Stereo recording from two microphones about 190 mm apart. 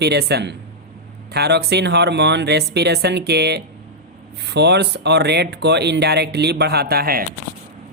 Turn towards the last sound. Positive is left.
turn(degrees=-55)  # may be behind; listen again after turning